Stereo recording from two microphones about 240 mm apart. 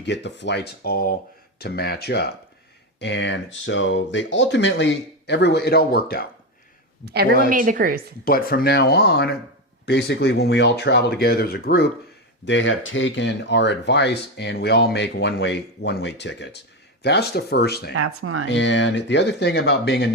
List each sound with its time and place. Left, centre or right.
0.0 s speech: left
7.0 s a woman's voice: right
8.2 s speech: left
12.5 s speech: left
17.9 s speech: right
18.4 s speech: left